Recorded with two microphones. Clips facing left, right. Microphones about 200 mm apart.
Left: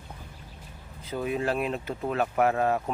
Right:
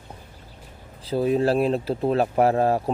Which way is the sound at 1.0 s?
35° right (ahead or behind).